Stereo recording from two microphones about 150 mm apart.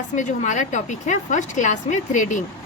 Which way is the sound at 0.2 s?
55° left (ahead or behind).